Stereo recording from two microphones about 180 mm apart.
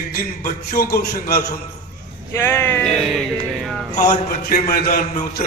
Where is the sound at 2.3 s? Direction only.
15° left (ahead or behind).